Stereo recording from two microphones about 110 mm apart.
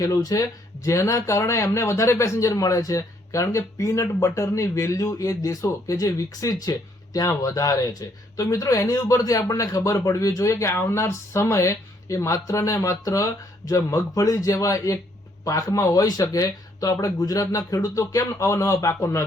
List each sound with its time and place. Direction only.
0.0 s speech: 30° left (ahead or behind)